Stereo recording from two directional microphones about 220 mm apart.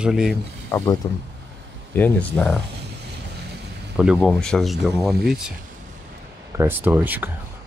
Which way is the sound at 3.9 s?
5° right (ahead or behind).